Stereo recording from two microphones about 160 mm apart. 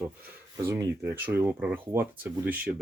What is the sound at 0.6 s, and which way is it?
Speech, 15° right (ahead or behind).